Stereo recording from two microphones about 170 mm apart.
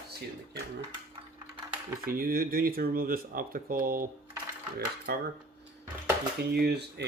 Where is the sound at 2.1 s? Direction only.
60° right (ahead or behind).